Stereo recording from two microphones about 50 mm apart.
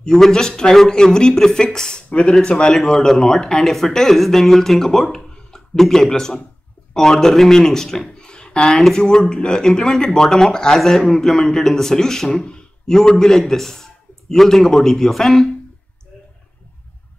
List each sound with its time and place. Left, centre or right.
0.2 s speech: centre
2.7 s a man's voice: centre